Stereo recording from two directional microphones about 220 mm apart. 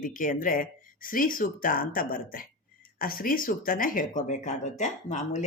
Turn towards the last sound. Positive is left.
turn(degrees=30)  # may be behind; listen again after turning